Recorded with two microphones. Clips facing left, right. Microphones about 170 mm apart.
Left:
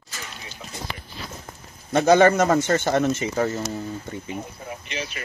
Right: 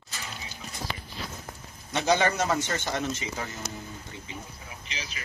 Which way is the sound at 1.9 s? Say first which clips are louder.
Left 9 dB; 50° left (ahead or behind).